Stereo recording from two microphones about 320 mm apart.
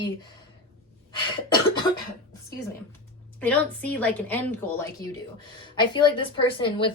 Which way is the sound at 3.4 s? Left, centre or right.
Centre.